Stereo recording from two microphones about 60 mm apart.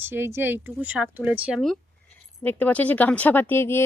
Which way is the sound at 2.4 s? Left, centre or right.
Left.